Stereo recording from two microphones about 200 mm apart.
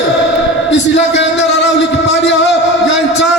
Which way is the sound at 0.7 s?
60° left (ahead or behind).